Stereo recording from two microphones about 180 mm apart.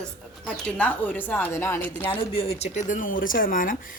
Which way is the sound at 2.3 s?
35° left (ahead or behind).